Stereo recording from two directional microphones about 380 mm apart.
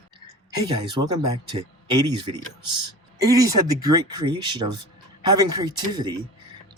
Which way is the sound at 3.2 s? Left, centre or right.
Centre.